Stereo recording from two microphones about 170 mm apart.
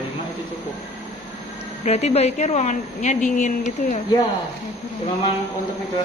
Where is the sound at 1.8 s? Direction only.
40° left (ahead or behind).